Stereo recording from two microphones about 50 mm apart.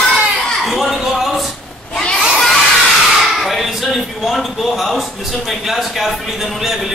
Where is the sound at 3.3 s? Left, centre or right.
Centre.